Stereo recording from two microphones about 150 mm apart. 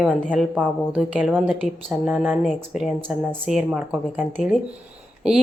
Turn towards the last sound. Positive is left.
turn(degrees=-5)  # may be behind; listen again after turning